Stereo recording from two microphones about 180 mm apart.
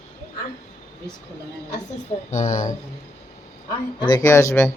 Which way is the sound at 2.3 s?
45° left (ahead or behind).